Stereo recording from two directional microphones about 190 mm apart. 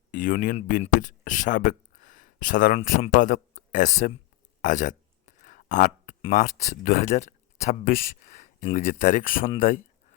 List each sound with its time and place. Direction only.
0.1 s speech: 45° left (ahead or behind)
4.6 s a sound: 40° left (ahead or behind)
6.2 s speech: 40° left (ahead or behind)